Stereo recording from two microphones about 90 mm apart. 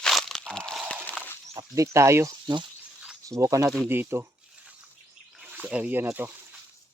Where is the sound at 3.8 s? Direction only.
25° right (ahead or behind).